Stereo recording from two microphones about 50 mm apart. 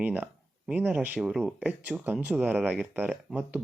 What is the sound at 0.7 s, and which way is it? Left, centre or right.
Speech, right.